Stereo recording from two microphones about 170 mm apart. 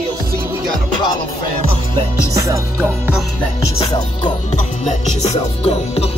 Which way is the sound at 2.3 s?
20° right (ahead or behind).